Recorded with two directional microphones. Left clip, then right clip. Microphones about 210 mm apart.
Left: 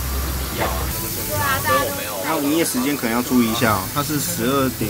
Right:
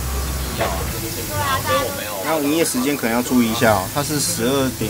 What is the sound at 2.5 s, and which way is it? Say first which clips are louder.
Speech: right 1 dB; 10° right (ahead or behind).